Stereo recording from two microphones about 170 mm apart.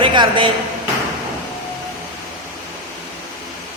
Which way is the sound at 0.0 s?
30° right (ahead or behind).